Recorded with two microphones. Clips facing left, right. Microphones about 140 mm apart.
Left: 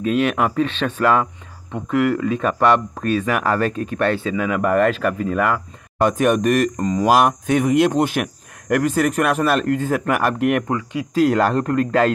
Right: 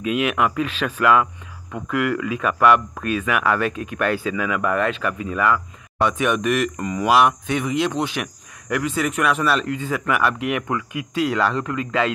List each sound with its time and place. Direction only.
0.0 s a man's voice: 35° left (ahead or behind)
10.7 s speech: 30° left (ahead or behind)
11.2 s a man's voice: 50° left (ahead or behind)